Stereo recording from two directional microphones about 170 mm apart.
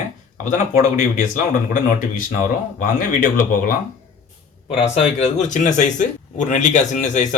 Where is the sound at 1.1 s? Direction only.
50° left (ahead or behind).